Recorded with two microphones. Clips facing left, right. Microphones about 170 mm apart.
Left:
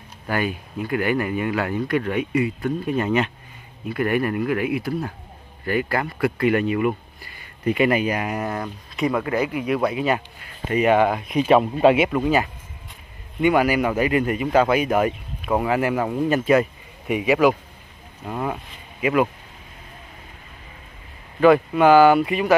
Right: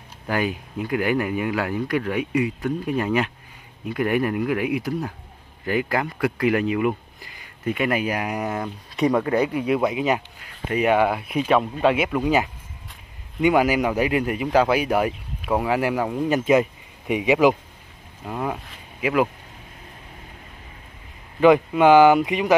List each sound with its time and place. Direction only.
0.3 s speech: 15° right (ahead or behind)
7.6 s speech: centre (ahead or behind); by 8.7 s 15° right (ahead or behind)
8.9 s speech: 35° right (ahead or behind)
9.8 s speech: 15° right (ahead or behind)
11.4 s speech: 5° left (ahead or behind)
12.2 s speech: 15° right (ahead or behind)
17.1 s speech: 20° right (ahead or behind)
18.2 s speech: centre (ahead or behind)
21.4 s speech: 15° right (ahead or behind)